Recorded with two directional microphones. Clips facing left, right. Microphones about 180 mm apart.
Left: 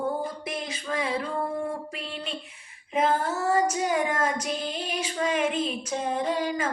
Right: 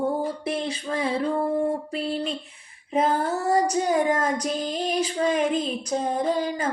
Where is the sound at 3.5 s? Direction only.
35° right (ahead or behind).